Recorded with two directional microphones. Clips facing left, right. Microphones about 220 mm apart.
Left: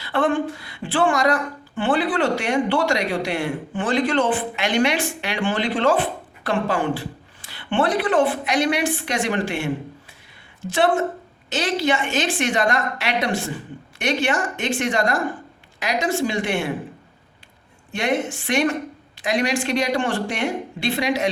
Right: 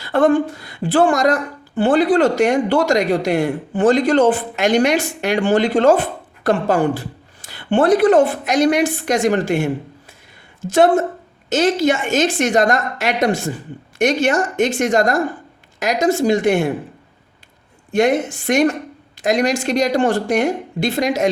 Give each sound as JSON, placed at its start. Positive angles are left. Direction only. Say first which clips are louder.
{"t": 0.0, "sound": "a woman's voice", "louder": "right 6 dB", "side_deg": -40}
{"t": 17.9, "sound": "a woman's voice", "louder": "right 7 dB", "side_deg": -45}